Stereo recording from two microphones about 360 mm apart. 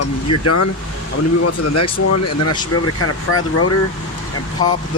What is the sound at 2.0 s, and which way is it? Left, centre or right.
Speech, left.